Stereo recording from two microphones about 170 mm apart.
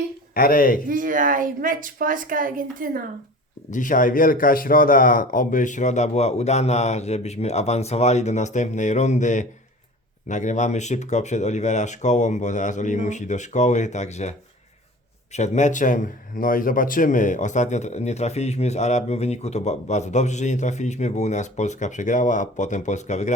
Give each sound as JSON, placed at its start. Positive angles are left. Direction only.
{"t": 0.3, "sound": "speech", "side_deg": 60}
{"t": 0.9, "sound": "a woman's voice", "side_deg": -50}
{"t": 3.7, "sound": "speech", "side_deg": 50}